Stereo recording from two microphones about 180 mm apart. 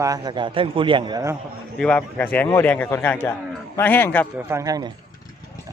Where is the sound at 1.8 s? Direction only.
10° left (ahead or behind).